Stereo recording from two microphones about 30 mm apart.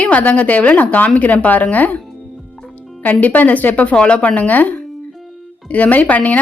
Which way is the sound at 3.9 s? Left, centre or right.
Left.